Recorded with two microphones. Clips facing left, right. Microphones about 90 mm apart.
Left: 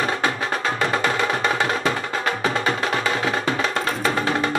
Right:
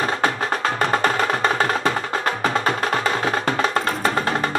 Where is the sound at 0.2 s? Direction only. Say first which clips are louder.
Right 2 dB; 40° right (ahead or behind).